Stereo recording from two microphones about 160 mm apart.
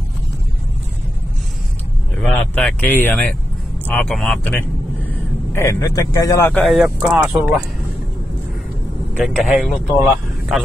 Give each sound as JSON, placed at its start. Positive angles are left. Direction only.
{"t": 2.1, "sound": "speech", "side_deg": 10}
{"t": 5.5, "sound": "speech", "side_deg": 20}
{"t": 6.6, "sound": "speech", "side_deg": 0}
{"t": 9.2, "sound": "speech", "side_deg": 0}